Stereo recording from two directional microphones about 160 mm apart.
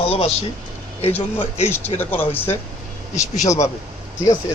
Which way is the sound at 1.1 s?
10° left (ahead or behind).